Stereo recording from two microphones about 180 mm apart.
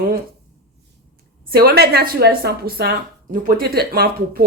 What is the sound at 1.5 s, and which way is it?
Speech, 55° right (ahead or behind).